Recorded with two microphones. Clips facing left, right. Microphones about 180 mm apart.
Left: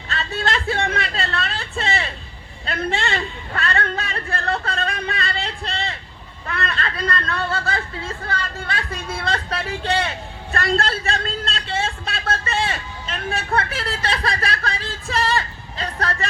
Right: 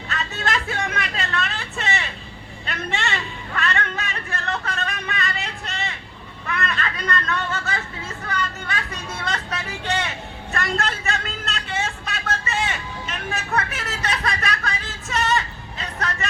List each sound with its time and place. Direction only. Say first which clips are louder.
0.1 s a sound: left 2 dB; 30° left (ahead or behind)
2.6 s a man's voice: left 4 dB; 30° left (ahead or behind)
10.5 s vehicle: left 4 dB; 30° left (ahead or behind)
14.4 s speech: left 2 dB; 30° left (ahead or behind)